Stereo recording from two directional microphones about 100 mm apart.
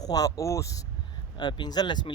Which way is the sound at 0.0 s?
40° left (ahead or behind).